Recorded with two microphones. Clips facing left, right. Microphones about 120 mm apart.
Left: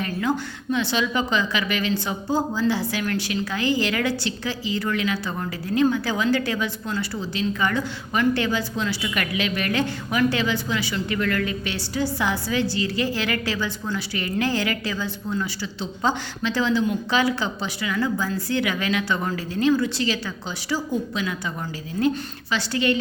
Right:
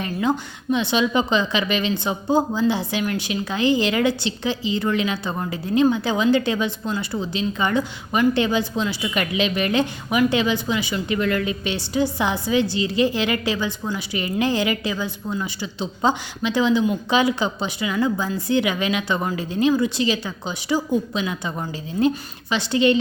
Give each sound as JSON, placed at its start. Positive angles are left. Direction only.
{"t": 0.0, "sound": "a woman's voice", "side_deg": -20}